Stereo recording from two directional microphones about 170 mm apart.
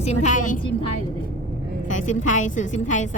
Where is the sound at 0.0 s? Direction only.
40° left (ahead or behind).